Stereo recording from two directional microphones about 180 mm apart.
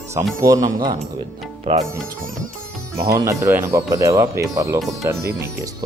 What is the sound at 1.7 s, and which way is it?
Speech, 35° right (ahead or behind).